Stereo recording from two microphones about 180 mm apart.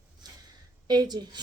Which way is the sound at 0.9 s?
20° right (ahead or behind).